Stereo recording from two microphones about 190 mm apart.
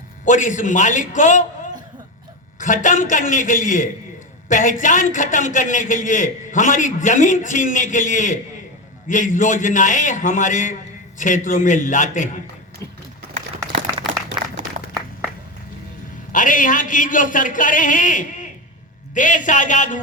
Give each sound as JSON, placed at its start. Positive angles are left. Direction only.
{"t": 0.3, "sound": "a man's voice", "side_deg": 40}
{"t": 2.6, "sound": "a man's voice", "side_deg": 40}
{"t": 16.3, "sound": "a man's voice", "side_deg": 45}